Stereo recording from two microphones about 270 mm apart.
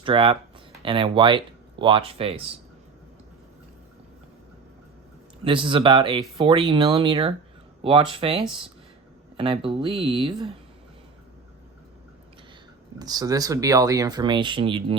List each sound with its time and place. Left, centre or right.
0.0 s speech: centre
5.4 s speech: centre
9.4 s speech: centre
13.0 s speech: centre